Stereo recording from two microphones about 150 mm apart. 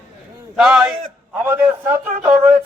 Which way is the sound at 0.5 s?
5° right (ahead or behind).